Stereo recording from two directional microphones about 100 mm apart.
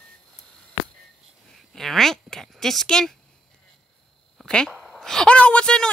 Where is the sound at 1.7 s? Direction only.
Centre (ahead or behind).